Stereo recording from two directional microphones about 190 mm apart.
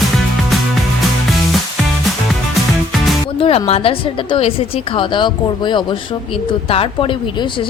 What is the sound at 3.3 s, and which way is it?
A woman's voice, 30° left (ahead or behind).